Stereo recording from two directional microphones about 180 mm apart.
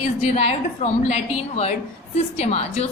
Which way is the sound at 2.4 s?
35° left (ahead or behind).